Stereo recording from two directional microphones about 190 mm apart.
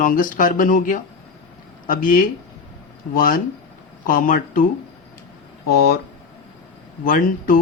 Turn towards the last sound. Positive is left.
turn(degrees=50)  # may be behind; listen again after turning